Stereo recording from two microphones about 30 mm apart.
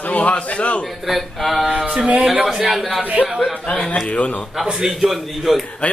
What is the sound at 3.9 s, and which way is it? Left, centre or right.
Speech, left.